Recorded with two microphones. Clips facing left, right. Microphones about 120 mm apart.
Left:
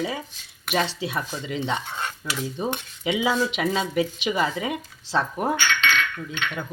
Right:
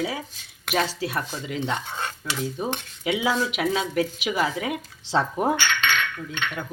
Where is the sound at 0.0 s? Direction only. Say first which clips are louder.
Even; 5° right (ahead or behind).